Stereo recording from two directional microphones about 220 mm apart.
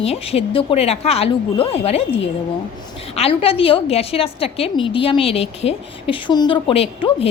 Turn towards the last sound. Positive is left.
turn(degrees=25)  # may be behind; listen again after turning